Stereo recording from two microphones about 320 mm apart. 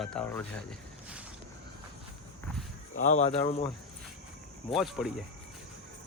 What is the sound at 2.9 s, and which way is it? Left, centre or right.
Speech, centre.